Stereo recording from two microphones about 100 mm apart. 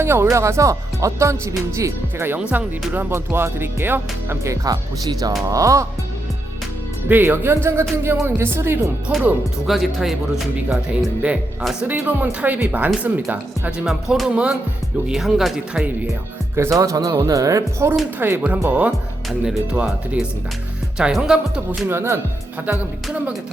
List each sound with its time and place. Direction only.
0.0 s speech: 25° right (ahead or behind)
4.6 s speech: 40° right (ahead or behind)
7.1 s speech: 20° right (ahead or behind)
9.0 s speech: 5° right (ahead or behind)
11.9 s speech: 15° right (ahead or behind)
16.6 s speech: 30° right (ahead or behind)
18.2 s speech: 20° right (ahead or behind)
19.5 s speech: 5° right (ahead or behind)
21.8 s speech: 25° right (ahead or behind)